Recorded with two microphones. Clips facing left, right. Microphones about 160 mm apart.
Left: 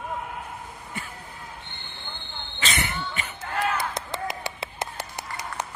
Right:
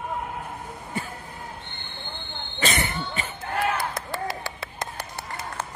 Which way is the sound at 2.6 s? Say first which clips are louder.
Right 3 dB; 50° right (ahead or behind).